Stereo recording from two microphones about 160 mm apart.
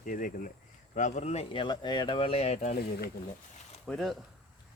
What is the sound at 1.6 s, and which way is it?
Speech, 25° left (ahead or behind).